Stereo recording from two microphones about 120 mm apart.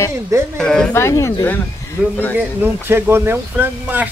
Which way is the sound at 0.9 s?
25° left (ahead or behind).